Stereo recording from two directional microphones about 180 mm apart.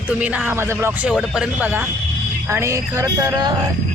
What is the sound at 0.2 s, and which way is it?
Speech, 10° right (ahead or behind).